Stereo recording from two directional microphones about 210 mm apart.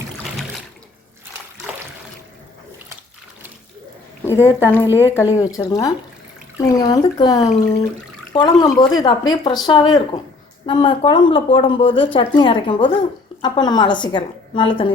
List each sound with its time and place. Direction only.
4.2 s speech: 10° left (ahead or behind)
4.9 s speech: 10° right (ahead or behind)
5.1 s speech: 15° left (ahead or behind)